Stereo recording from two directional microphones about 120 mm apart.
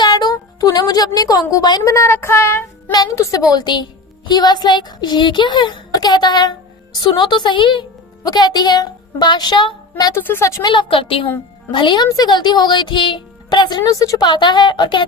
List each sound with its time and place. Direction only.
0.0 s speech: 35° left (ahead or behind); by 2.9 s 20° left (ahead or behind)
2.9 s a child's voice: 30° left (ahead or behind)
10.2 s a woman's voice: 20° left (ahead or behind)
10.6 s a woman's voice: 40° left (ahead or behind)